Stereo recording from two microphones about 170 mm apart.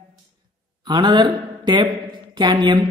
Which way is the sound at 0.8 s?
25° right (ahead or behind).